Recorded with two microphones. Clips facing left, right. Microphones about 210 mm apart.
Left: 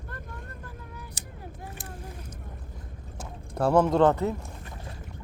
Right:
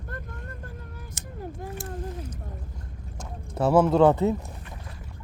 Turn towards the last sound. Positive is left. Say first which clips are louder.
# right 3 dB
turn(degrees=-15)  # may be behind; listen again after turning